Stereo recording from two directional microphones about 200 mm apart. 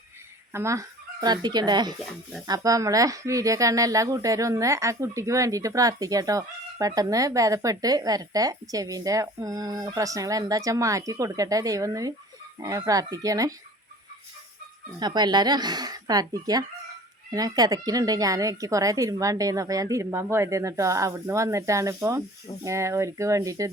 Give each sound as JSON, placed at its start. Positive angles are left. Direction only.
{"t": 0.5, "sound": "speech", "side_deg": -15}
{"t": 14.9, "sound": "speech", "side_deg": -20}